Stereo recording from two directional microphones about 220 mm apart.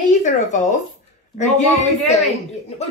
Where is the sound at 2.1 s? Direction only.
30° left (ahead or behind).